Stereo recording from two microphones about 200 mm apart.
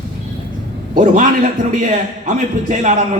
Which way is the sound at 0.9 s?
40° right (ahead or behind).